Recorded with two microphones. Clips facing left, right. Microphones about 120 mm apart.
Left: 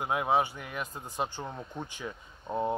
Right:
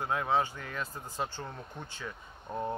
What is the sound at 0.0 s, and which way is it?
Speech, 15° left (ahead or behind).